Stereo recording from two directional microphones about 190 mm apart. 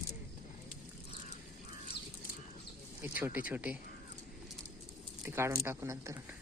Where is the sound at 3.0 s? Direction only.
10° right (ahead or behind).